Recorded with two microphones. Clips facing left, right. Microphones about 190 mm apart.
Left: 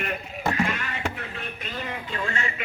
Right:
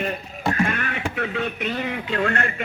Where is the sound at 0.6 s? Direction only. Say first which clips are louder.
Right 3 dB; 60° right (ahead or behind).